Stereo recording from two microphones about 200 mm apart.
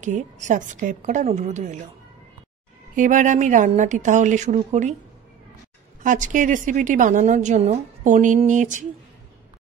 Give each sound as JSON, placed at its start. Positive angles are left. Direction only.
{"t": 0.0, "sound": "a woman's voice", "side_deg": -40}
{"t": 3.0, "sound": "a woman's voice", "side_deg": -40}
{"t": 6.0, "sound": "a woman's voice", "side_deg": -40}